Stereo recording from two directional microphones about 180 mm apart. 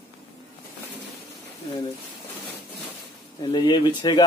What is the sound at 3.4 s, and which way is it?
Speech, 25° left (ahead or behind).